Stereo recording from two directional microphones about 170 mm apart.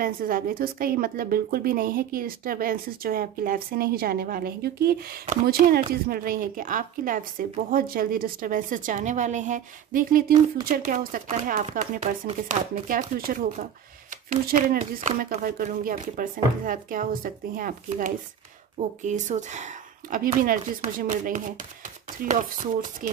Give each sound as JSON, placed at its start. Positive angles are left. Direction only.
{"t": 0.0, "sound": "a woman's voice", "side_deg": -55}